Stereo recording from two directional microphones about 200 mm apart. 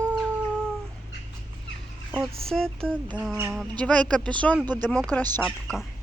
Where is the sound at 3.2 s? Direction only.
10° right (ahead or behind).